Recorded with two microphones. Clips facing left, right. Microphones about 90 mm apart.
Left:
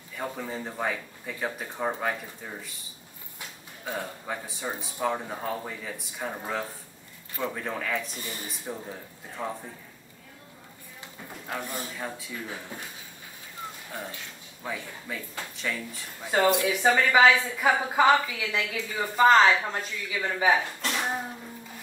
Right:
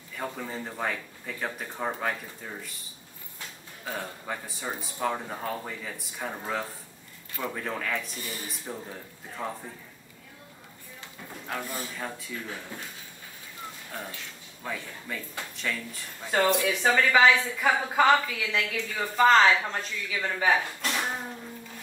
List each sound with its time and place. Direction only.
0.1 s speech: 5° left (ahead or behind)
3.8 s speech: 5° left (ahead or behind)
8.2 s speech: 20° left (ahead or behind)
8.5 s speech: centre (ahead or behind)
11.4 s a woman's voice: 15° left (ahead or behind)
11.9 s speech: 5° left (ahead or behind)
14.6 s a woman's voice: 5° left (ahead or behind)
20.8 s cough: centre (ahead or behind)